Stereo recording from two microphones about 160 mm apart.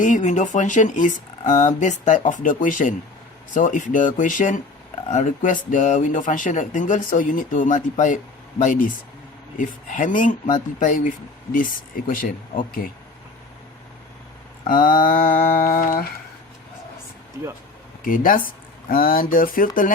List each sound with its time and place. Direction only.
0.0 s speech: 50° left (ahead or behind)
14.7 s speech: 60° left (ahead or behind)
18.0 s speech: 60° left (ahead or behind)